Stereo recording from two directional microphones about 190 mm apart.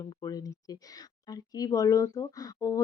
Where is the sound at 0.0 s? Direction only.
20° left (ahead or behind).